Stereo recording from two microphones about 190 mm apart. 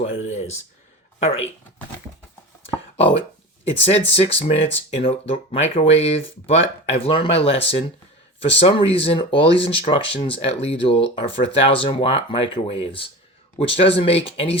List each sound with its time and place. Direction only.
0.3 s speech: 35° left (ahead or behind)
3.0 s speech: 30° left (ahead or behind)